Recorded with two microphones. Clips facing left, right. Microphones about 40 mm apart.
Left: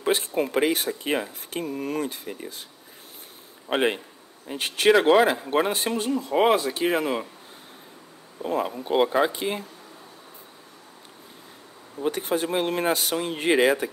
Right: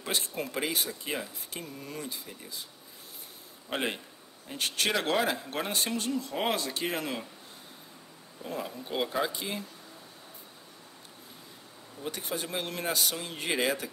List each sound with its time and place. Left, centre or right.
0.1 s speech: left
3.7 s speech: left
4.5 s speech: left
8.4 s speech: left
12.0 s speech: left